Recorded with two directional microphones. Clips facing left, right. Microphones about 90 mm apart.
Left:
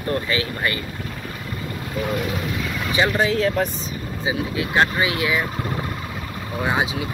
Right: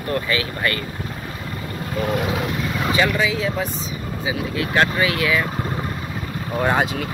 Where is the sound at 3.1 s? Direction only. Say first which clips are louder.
Left 2 dB; 50° left (ahead or behind).